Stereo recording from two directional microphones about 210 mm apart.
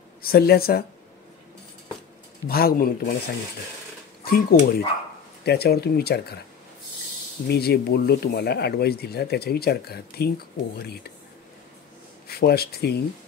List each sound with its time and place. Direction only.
0.2 s speech: 45° left (ahead or behind)
2.4 s speech: 45° left (ahead or behind)
4.2 s speech: 45° left (ahead or behind)
7.4 s speech: 50° left (ahead or behind)
12.3 s speech: 50° left (ahead or behind)